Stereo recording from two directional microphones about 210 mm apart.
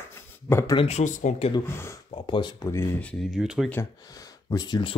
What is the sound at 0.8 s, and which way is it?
Speech, 30° left (ahead or behind).